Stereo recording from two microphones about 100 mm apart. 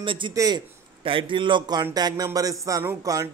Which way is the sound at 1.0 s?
55° right (ahead or behind).